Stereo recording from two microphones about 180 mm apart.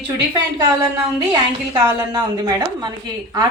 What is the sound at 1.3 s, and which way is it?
A woman's voice, 20° right (ahead or behind).